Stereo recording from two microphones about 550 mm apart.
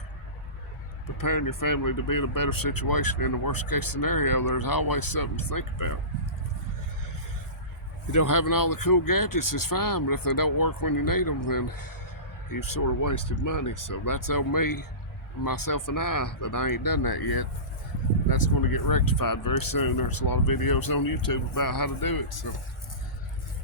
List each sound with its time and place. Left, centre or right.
1.0 s speech: left
8.1 s speech: left